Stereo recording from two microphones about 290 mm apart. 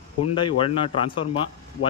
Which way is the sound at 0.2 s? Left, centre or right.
Centre.